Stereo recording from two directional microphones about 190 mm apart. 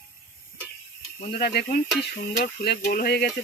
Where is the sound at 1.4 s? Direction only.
55° left (ahead or behind).